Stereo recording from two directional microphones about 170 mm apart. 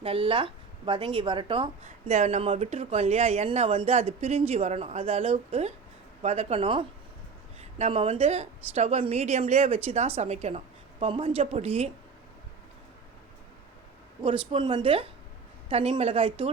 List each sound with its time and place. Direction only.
0.0 s a woman's voice: 35° right (ahead or behind)
14.2 s a woman's voice: 30° right (ahead or behind)